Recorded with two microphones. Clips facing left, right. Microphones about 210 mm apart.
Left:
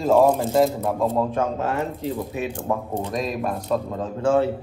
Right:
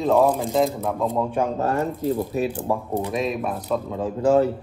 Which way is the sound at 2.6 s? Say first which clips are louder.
Right 1 dB; 10° right (ahead or behind).